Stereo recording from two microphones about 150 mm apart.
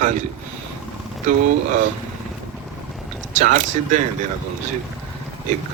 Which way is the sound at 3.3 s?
55° right (ahead or behind).